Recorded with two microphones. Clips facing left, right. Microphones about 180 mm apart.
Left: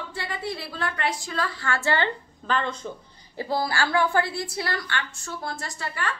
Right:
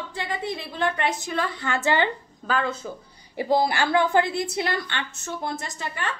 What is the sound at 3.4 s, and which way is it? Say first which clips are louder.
A woman's voice: right 4 dB; 20° right (ahead or behind).